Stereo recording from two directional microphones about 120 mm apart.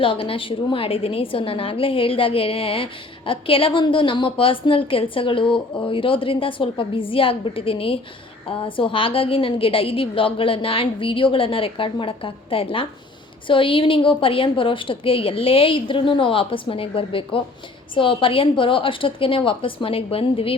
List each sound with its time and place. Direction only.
0.0 s a woman's voice: 50° left (ahead or behind)